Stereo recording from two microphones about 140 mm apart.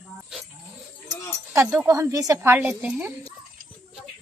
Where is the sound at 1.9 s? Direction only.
25° right (ahead or behind).